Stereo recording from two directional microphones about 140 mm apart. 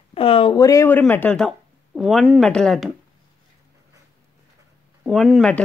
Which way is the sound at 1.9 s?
Centre (ahead or behind).